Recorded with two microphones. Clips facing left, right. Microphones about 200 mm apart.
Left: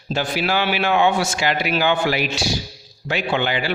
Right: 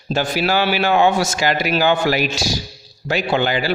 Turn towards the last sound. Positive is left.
turn(degrees=-40)  # may be behind; listen again after turning